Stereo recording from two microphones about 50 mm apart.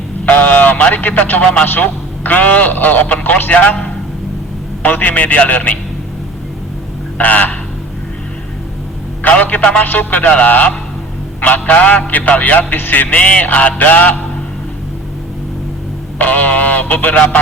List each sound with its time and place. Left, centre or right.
0.3 s a sound: left
1.8 s a man's voice: left
4.8 s a man's voice: left
7.2 s a man's voice: left
9.6 s speech: left
9.8 s a man's voice: left
16.1 s a man's voice: left